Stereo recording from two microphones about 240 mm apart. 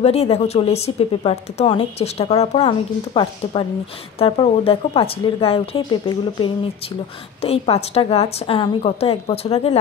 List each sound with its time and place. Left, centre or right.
0.0 s a woman's voice: left